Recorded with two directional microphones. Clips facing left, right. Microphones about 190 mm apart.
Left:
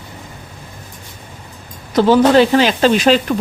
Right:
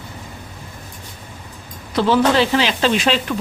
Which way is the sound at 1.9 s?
40° left (ahead or behind).